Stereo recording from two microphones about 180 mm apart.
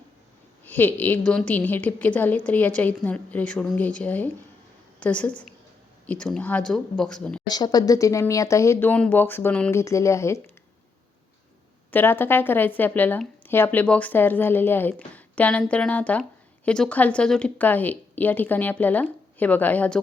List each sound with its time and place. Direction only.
0.6 s a woman's voice: 10° left (ahead or behind)
7.4 s speech: 20° left (ahead or behind)
11.9 s speech: 10° left (ahead or behind)